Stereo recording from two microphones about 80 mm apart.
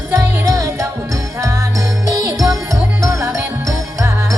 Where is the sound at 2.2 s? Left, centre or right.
Right.